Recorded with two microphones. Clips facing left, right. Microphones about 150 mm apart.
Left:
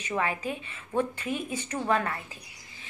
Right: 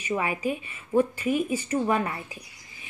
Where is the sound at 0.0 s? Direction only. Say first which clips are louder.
Right 3 dB; 10° right (ahead or behind).